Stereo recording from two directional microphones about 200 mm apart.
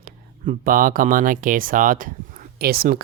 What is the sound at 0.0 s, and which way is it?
Speech, 45° right (ahead or behind).